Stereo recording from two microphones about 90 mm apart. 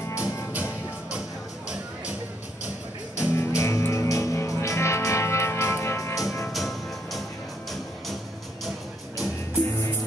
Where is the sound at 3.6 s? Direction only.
35° left (ahead or behind).